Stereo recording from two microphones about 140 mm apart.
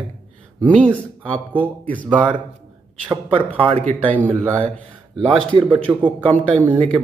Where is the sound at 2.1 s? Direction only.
35° right (ahead or behind).